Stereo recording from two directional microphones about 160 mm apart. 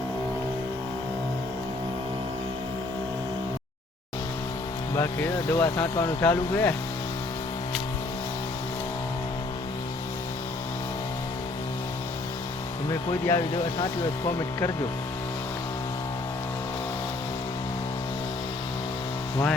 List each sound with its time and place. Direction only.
4.9 s speech: 15° left (ahead or behind)
12.9 s speech: 20° left (ahead or behind)